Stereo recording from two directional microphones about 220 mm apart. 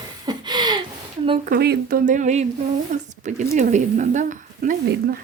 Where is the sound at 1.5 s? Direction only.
45° right (ahead or behind).